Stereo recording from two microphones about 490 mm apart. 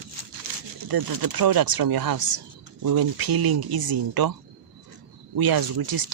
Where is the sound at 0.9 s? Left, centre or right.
Right.